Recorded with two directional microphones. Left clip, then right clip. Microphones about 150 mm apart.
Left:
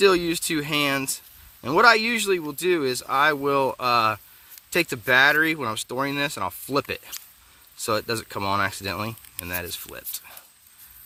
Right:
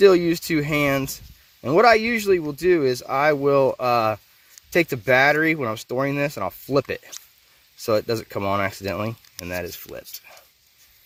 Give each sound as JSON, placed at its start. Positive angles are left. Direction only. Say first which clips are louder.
{"t": 0.0, "sound": "speech", "louder": "right 4 dB", "side_deg": -20}
{"t": 8.3, "sound": "speech", "louder": "left 1 dB", "side_deg": -5}
{"t": 8.6, "sound": "speech", "louder": "right 1 dB", "side_deg": -20}
{"t": 9.9, "sound": "a sound", "louder": "right 1 dB", "side_deg": -5}